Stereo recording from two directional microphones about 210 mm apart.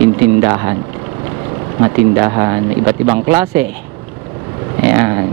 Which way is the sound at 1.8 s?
20° right (ahead or behind).